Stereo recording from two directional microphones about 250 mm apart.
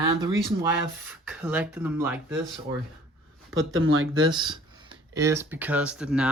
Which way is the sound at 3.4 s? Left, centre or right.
Right.